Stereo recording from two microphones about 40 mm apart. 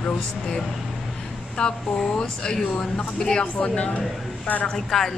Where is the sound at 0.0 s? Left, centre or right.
Left.